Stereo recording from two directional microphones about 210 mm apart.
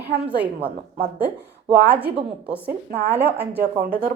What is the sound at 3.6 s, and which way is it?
Speech, 45° right (ahead or behind).